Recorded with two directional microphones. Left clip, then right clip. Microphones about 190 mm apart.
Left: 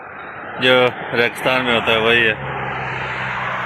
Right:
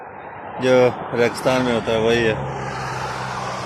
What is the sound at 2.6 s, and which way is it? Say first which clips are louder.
Vehicle: left 3 dB; 45° right (ahead or behind).